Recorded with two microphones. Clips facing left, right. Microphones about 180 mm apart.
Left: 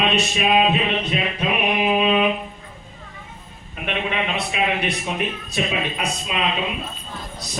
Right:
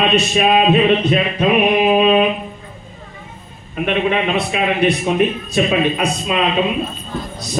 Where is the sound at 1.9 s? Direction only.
45° right (ahead or behind).